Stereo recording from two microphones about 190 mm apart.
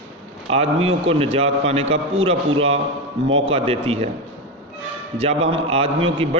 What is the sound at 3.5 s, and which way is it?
Speech, 30° right (ahead or behind).